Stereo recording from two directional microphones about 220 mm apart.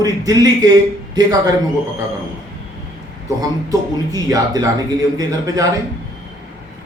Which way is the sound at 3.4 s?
15° right (ahead or behind).